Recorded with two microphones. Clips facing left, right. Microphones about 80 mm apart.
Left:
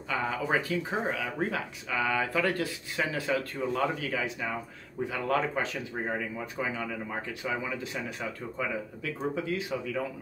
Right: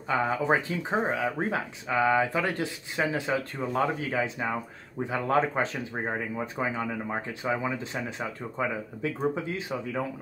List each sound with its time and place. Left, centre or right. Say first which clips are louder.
0.1 s speech: right 4 dB; right